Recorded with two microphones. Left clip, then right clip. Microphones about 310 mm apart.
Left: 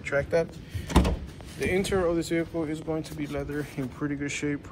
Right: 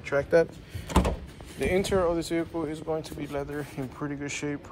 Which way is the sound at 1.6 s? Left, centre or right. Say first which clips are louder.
Right 1 dB; centre.